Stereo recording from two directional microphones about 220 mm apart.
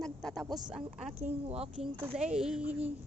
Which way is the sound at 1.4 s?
25° right (ahead or behind).